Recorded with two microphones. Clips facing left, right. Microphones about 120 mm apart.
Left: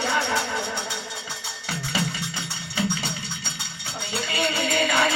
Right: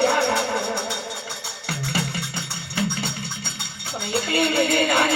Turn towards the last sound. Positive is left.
turn(degrees=-55)  # may be behind; listen again after turning